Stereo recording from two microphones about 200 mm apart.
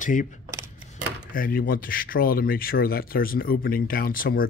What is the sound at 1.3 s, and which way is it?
Speech, 45° left (ahead or behind).